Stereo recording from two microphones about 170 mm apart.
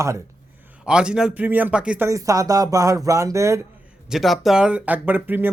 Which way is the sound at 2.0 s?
20° right (ahead or behind).